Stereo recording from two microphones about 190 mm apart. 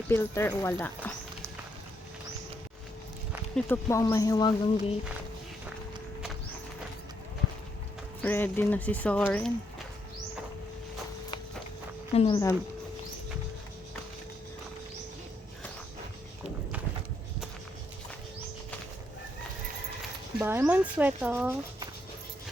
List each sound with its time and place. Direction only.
0.1 s speech: 10° left (ahead or behind)
3.5 s speech: 15° left (ahead or behind)
8.2 s speech: 10° left (ahead or behind)
12.1 s speech: 30° left (ahead or behind)
20.4 s speech: 10° right (ahead or behind)